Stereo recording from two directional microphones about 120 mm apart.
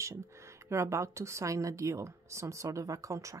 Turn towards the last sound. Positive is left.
turn(degrees=-25)  # may be behind; listen again after turning